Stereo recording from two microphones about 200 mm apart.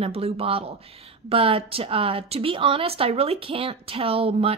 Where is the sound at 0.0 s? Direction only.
30° right (ahead or behind).